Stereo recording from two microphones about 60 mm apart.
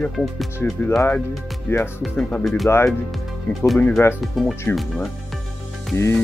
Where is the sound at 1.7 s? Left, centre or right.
Left.